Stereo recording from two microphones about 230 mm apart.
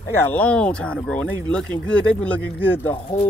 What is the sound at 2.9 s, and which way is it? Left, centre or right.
Speech, left.